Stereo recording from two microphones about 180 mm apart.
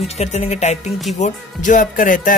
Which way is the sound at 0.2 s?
40° left (ahead or behind).